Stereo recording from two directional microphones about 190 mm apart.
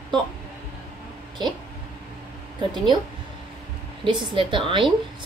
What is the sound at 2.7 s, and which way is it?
Speech, 25° right (ahead or behind).